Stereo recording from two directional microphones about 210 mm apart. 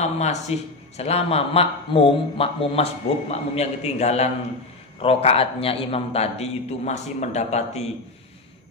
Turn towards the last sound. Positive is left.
turn(degrees=30)  # may be behind; listen again after turning